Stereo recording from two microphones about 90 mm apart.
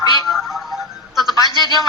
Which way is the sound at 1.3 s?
50° left (ahead or behind).